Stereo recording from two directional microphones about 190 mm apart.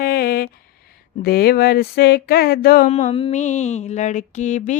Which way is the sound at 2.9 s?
35° left (ahead or behind).